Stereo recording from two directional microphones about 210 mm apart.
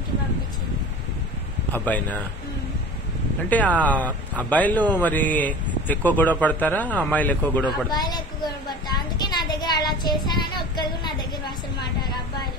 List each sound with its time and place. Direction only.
1.7 s speech: 5° left (ahead or behind)
3.4 s speech: 5° left (ahead or behind)
7.7 s a sound: 20° left (ahead or behind)